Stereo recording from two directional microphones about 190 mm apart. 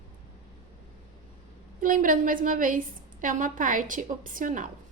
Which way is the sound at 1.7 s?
45° right (ahead or behind).